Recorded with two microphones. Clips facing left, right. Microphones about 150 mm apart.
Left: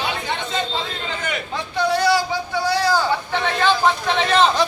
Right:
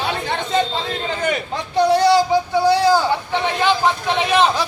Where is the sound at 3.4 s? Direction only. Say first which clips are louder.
Even; 15° right (ahead or behind).